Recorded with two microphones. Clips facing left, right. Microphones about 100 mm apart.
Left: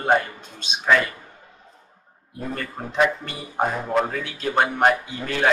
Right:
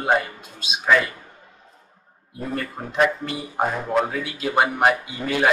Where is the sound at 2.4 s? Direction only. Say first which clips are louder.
Right 2 dB; centre (ahead or behind).